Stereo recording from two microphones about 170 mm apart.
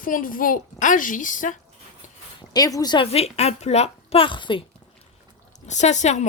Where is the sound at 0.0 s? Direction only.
55° left (ahead or behind).